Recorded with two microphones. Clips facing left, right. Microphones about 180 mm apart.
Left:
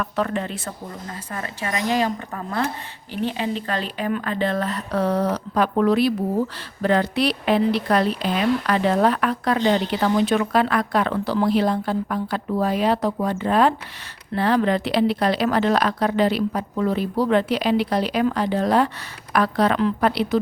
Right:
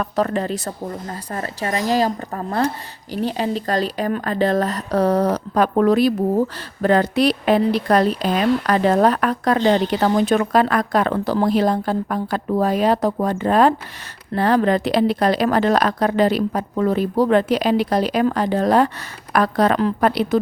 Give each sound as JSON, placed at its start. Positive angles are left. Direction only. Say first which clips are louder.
{"t": 0.0, "sound": "a woman's voice", "louder": "right 4 dB", "side_deg": -40}